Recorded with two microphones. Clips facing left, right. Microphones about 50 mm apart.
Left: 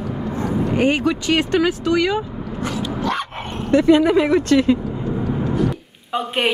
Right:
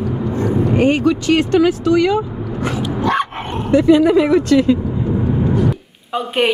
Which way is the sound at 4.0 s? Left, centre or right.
Left.